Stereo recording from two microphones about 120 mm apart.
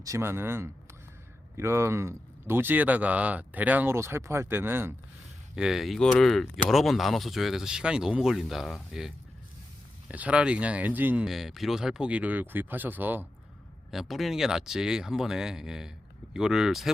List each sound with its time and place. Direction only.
0.0 s speech: 25° right (ahead or behind)
5.5 s speech: 5° right (ahead or behind)
11.3 s speech: centre (ahead or behind); by 13.2 s 15° right (ahead or behind)
13.9 s speech: centre (ahead or behind)